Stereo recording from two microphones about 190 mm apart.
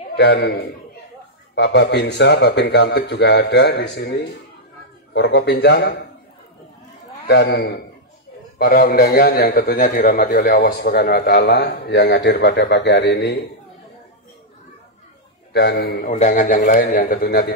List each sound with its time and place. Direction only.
0.1 s a man's voice: 60° left (ahead or behind)
7.2 s a man's voice: 70° left (ahead or behind)
15.5 s a man's voice: 55° left (ahead or behind)